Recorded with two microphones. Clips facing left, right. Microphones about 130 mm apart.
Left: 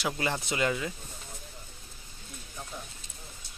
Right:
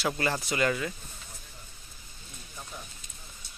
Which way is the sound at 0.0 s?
15° left (ahead or behind).